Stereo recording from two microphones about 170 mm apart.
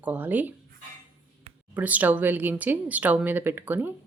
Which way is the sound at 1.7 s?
10° right (ahead or behind).